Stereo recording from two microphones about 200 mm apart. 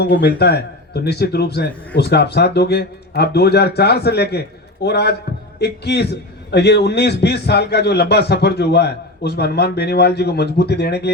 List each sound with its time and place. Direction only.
0.0 s a man's voice: 55° left (ahead or behind)